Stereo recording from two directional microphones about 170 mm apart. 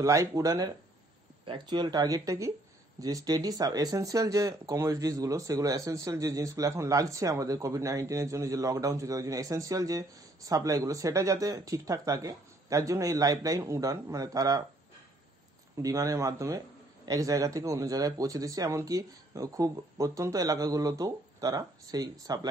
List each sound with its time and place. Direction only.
0.0 s speech: 20° right (ahead or behind)
15.7 s speech: 20° right (ahead or behind)